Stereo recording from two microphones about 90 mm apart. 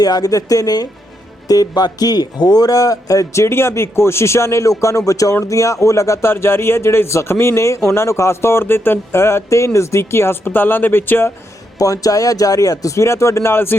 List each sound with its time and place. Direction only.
0.0 s a woman's voice: 45° left (ahead or behind); by 11.3 s 25° left (ahead or behind)
11.8 s speech: 40° left (ahead or behind); by 13.7 s 25° left (ahead or behind)